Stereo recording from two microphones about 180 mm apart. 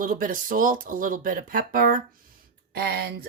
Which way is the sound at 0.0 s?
50° right (ahead or behind).